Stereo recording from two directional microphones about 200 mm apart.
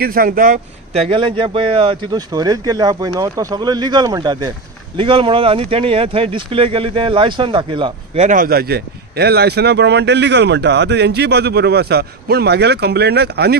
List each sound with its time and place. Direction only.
0.0 s speech: 45° right (ahead or behind); by 8.2 s 25° right (ahead or behind)
8.2 s a man's voice: 40° right (ahead or behind)